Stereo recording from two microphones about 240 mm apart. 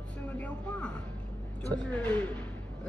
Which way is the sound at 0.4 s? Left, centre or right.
Centre.